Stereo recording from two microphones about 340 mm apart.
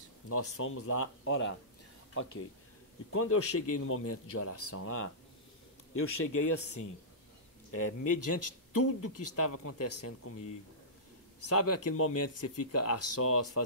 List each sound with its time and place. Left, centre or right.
0.3 s speech: left
3.1 s speech: left
11.4 s speech: left